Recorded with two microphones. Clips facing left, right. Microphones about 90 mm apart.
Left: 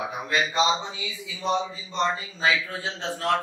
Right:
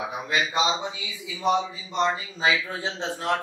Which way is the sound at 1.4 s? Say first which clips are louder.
Right 2 dB; 15° right (ahead or behind).